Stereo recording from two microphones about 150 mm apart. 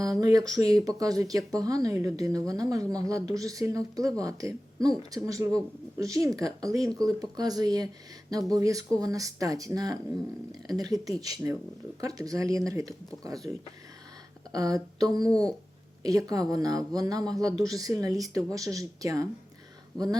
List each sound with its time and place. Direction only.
0.0 s speech: 25° right (ahead or behind)
14.5 s speech: 25° right (ahead or behind)